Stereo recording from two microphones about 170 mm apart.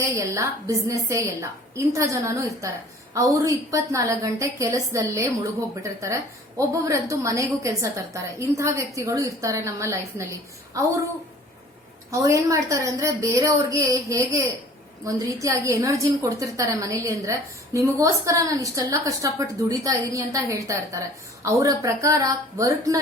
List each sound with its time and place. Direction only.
0.0 s a woman's voice: 20° right (ahead or behind)
12.1 s a woman's voice: 20° right (ahead or behind)